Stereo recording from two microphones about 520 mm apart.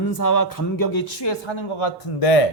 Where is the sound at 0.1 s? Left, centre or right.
Left.